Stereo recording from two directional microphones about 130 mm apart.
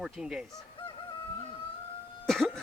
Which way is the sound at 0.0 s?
5° right (ahead or behind).